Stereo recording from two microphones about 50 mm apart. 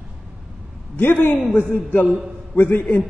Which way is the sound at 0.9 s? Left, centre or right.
Left.